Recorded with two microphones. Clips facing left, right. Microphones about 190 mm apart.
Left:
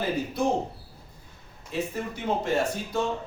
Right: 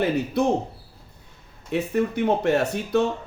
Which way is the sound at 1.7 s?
65° right (ahead or behind).